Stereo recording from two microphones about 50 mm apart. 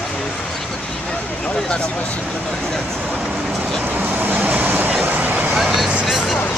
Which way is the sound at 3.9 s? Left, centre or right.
Right.